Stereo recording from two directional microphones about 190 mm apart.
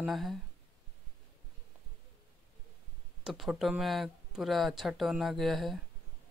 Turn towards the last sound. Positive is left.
turn(degrees=0)  # may be behind; listen again after turning